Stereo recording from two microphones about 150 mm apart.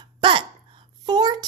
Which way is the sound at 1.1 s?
30° right (ahead or behind).